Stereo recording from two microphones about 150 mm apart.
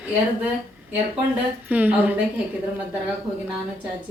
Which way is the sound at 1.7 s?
10° right (ahead or behind).